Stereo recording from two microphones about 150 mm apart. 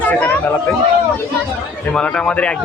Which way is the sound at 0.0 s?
10° left (ahead or behind).